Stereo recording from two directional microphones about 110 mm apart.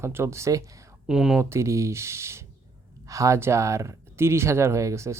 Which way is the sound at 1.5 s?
25° right (ahead or behind).